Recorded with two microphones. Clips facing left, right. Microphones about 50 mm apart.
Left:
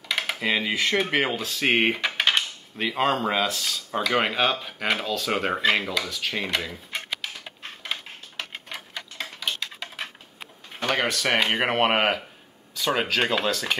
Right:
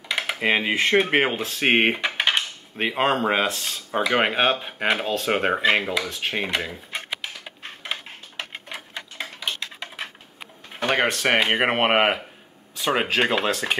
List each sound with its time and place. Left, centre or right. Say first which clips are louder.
0.4 s speech: right 5 dB; right
2.0 s dishes: right 1 dB; centre
2.8 s speech: right 2 dB; right
5.5 s dishes: right 2 dB; centre
5.8 s speech: right 2 dB; right
7.4 s tick-tock: right 1 dB; centre
10.8 s a sound: right 3 dB; right
11.1 s speech: right 3 dB; right
11.3 s speech: right 1 dB; centre
13.5 s speech: right 2 dB; right